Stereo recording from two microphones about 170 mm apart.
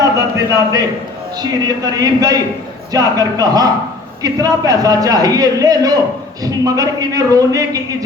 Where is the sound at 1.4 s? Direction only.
20° right (ahead or behind).